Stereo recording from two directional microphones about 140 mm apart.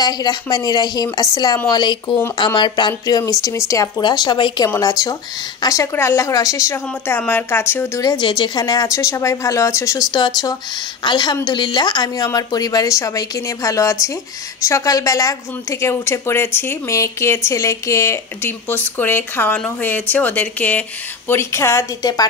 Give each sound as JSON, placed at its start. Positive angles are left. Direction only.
{"t": 0.0, "sound": "a woman's voice", "side_deg": 30}